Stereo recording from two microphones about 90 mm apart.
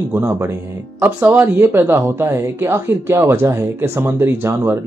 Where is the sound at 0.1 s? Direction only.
30° right (ahead or behind).